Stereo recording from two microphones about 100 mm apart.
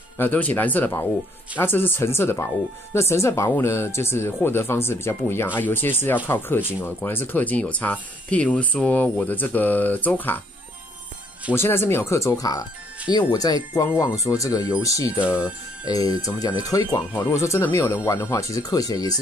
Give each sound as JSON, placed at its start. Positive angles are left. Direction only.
{"t": 0.2, "sound": "speech", "side_deg": 15}
{"t": 11.5, "sound": "speech", "side_deg": 25}
{"t": 17.1, "sound": "speech", "side_deg": 25}